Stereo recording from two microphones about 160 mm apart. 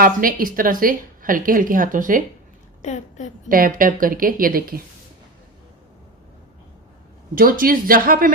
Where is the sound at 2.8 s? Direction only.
50° left (ahead or behind).